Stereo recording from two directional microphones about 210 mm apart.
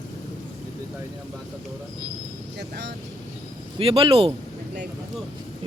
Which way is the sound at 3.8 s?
25° right (ahead or behind).